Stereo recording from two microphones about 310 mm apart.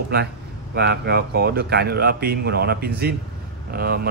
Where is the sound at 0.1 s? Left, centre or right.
Right.